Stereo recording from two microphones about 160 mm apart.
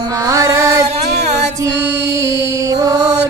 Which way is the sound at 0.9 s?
45° right (ahead or behind).